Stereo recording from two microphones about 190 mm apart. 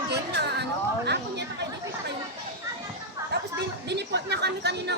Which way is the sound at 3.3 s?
60° right (ahead or behind).